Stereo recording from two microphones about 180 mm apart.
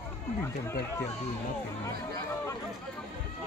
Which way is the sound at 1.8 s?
20° left (ahead or behind).